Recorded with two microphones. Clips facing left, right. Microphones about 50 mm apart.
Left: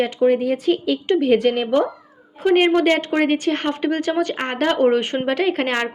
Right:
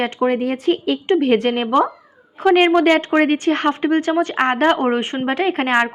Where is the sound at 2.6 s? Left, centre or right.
Right.